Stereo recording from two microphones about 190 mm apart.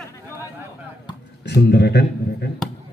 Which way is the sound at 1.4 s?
60° left (ahead or behind).